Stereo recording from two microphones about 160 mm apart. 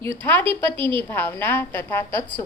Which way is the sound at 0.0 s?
15° left (ahead or behind).